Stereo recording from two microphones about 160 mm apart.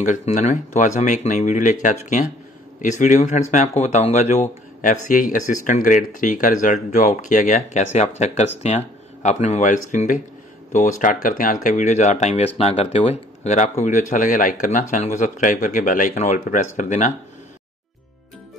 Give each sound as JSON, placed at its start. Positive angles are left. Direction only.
{"t": 0.0, "sound": "speech", "side_deg": 50}